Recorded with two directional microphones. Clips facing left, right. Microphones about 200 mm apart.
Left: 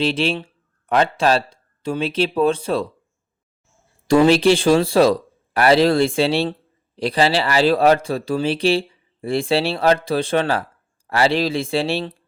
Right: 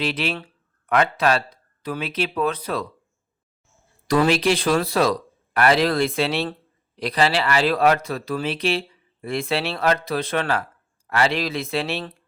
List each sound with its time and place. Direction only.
0.0 s speech: 30° left (ahead or behind)
4.1 s speech: 30° left (ahead or behind)